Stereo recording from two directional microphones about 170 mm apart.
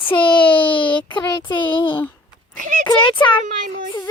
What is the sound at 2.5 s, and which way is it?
Speech, 45° right (ahead or behind).